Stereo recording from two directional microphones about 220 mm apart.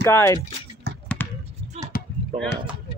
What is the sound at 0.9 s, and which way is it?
Basketball bounce, 50° right (ahead or behind).